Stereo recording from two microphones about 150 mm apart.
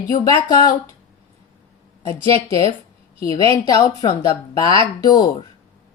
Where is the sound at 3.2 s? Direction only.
20° left (ahead or behind).